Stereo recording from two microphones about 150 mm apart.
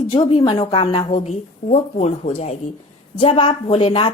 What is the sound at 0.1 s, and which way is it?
Speech, 35° left (ahead or behind).